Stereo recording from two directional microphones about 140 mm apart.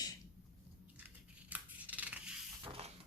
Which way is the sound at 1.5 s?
10° right (ahead or behind).